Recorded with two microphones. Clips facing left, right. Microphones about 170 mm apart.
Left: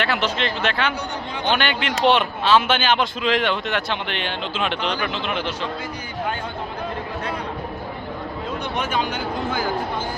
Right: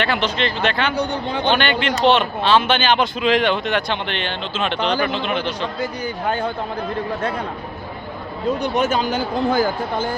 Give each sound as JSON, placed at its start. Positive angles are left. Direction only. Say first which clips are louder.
{"t": 0.0, "sound": "speech", "louder": "right 2 dB", "side_deg": 5}
{"t": 0.9, "sound": "a man's voice", "louder": "right 7 dB", "side_deg": -30}
{"t": 1.5, "sound": "speech", "louder": "right 3 dB", "side_deg": 5}
{"t": 8.7, "sound": "speech", "louder": "right 5 dB", "side_deg": -40}